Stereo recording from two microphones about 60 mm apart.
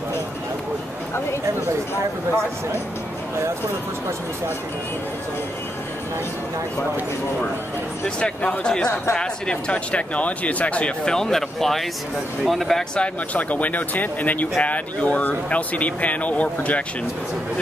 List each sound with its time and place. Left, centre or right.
8.2 s speech: centre
12.9 s speech: left